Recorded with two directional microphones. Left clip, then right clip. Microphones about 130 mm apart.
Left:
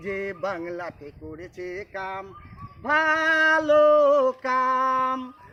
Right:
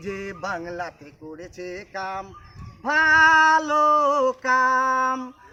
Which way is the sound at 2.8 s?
20° right (ahead or behind).